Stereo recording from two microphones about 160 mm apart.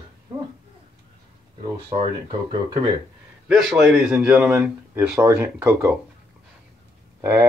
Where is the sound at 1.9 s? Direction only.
35° right (ahead or behind).